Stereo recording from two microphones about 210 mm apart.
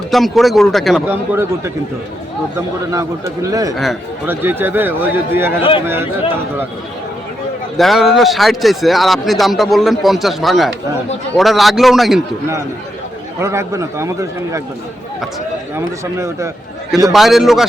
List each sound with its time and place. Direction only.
0.1 s speech: centre (ahead or behind)
2.6 s a man's voice: 15° right (ahead or behind)
3.8 s a man's voice: 5° right (ahead or behind)
7.8 s speech: centre (ahead or behind)
13.4 s a man's voice: 15° right (ahead or behind)
15.7 s a man's voice: 15° right (ahead or behind)
17.1 s speech: centre (ahead or behind)